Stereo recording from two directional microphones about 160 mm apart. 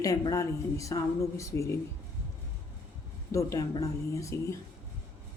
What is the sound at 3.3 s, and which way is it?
Speech, 20° left (ahead or behind).